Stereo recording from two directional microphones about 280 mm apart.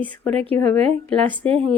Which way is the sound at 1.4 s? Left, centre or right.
Right.